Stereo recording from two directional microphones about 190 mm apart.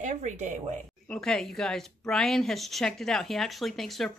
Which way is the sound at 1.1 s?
5° left (ahead or behind).